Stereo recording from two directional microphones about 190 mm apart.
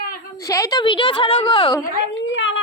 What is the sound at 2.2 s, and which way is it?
Speech, 75° left (ahead or behind).